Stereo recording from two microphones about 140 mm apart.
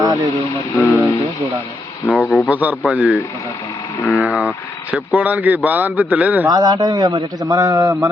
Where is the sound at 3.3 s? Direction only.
20° left (ahead or behind).